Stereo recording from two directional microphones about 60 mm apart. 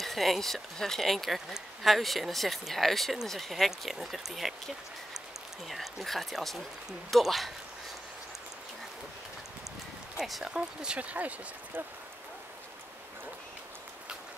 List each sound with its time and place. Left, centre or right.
0.0 s speech: centre
5.7 s speech: centre
10.1 s speech: centre; by 11.3 s right